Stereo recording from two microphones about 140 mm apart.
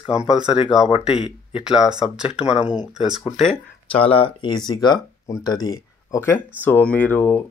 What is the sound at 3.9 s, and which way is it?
Speech, 40° left (ahead or behind).